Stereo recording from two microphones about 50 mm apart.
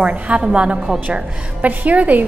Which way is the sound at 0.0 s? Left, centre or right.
Right.